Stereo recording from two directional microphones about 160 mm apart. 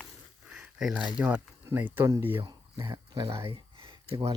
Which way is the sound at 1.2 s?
10° right (ahead or behind).